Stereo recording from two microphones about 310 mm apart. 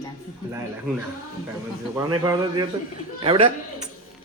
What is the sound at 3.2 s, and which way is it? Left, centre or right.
Speech, centre.